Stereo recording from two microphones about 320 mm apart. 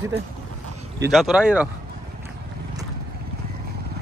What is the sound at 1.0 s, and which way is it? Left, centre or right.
Speech, centre.